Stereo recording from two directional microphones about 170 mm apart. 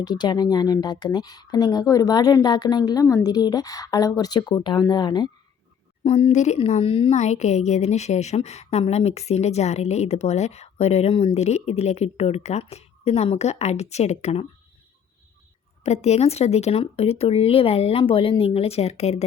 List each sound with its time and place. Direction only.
0.0 s speech: 25° left (ahead or behind)
6.0 s speech: 40° left (ahead or behind)
15.8 s speech: 40° left (ahead or behind)